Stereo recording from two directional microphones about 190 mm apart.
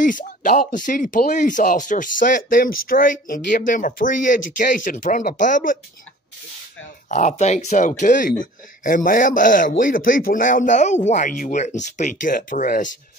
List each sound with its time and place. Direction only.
0.0 s speech: 45° left (ahead or behind)
7.1 s speech: 40° left (ahead or behind)